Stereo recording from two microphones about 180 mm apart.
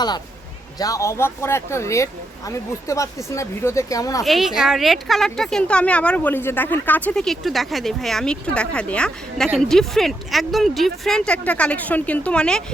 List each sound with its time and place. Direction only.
0.8 s speech: 20° left (ahead or behind)
4.2 s a woman's voice: centre (ahead or behind)